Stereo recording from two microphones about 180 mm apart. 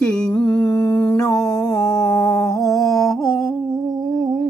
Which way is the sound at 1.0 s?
10° left (ahead or behind).